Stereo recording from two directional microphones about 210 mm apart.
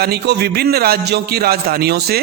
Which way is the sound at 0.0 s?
50° right (ahead or behind).